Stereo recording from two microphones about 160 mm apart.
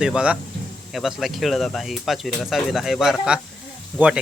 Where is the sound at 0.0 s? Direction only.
5° right (ahead or behind).